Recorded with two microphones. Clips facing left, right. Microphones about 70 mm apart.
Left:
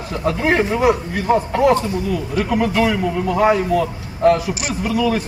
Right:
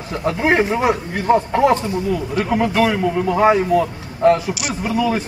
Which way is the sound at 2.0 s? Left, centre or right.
Right.